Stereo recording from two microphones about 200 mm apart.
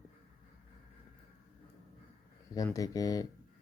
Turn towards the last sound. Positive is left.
turn(degrees=15)  # may be behind; listen again after turning